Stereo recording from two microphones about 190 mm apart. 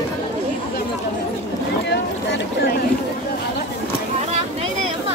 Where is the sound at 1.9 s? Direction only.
60° left (ahead or behind).